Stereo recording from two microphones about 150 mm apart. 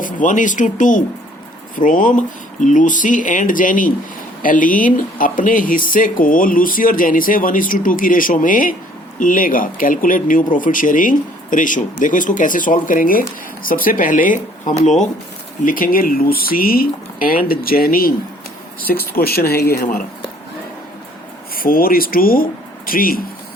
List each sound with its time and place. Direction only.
0.0 s speech: 60° left (ahead or behind)
15.6 s speech: 70° left (ahead or behind)
18.9 s speech: 90° left
21.5 s speech: 75° left (ahead or behind)